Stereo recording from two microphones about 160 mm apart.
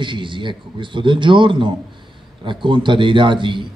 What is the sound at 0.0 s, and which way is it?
A man's voice, 30° right (ahead or behind).